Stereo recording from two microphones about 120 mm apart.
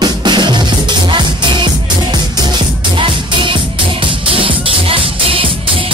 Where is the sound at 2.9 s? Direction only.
45° right (ahead or behind).